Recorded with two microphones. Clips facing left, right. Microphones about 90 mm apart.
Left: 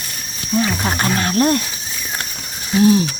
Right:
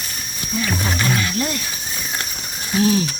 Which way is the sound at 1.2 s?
50° left (ahead or behind).